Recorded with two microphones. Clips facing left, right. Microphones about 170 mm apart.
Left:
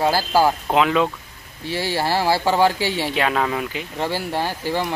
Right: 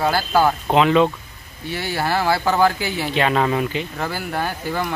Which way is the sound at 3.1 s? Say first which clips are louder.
Right 6 dB; centre (ahead or behind).